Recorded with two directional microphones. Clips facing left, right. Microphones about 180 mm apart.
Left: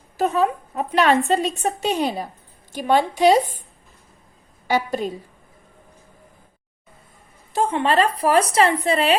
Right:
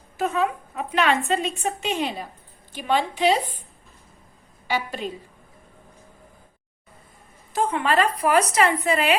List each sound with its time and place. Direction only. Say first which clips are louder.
0.2 s a woman's voice: left 4 dB; 35° left (ahead or behind)
4.7 s a woman's voice: left 5 dB; 40° left (ahead or behind)
7.5 s a woman's voice: left 3 dB; 25° left (ahead or behind)